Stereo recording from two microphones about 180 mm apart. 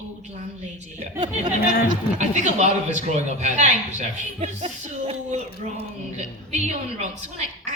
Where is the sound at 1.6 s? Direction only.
55° left (ahead or behind).